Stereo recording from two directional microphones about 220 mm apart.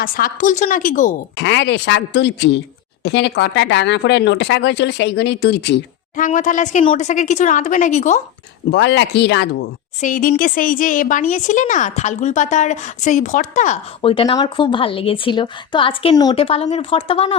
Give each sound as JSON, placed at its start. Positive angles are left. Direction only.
{"t": 0.0, "sound": "speech", "side_deg": 40}
{"t": 1.4, "sound": "speech", "side_deg": 55}
{"t": 6.1, "sound": "speech", "side_deg": 35}
{"t": 8.7, "sound": "speech", "side_deg": 50}
{"t": 10.0, "sound": "speech", "side_deg": 40}